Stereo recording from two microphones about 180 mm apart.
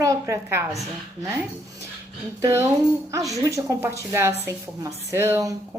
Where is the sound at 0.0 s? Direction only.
15° right (ahead or behind).